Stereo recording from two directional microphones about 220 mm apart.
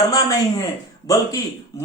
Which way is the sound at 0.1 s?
15° left (ahead or behind).